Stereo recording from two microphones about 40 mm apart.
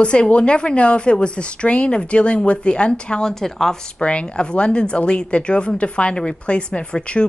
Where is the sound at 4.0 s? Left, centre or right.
Left.